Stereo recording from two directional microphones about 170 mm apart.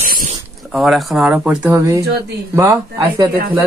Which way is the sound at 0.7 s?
Centre (ahead or behind).